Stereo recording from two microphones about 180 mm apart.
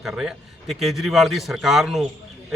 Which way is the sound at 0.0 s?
5° right (ahead or behind).